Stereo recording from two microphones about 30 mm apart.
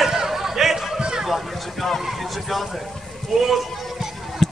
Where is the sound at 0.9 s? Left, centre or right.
Right.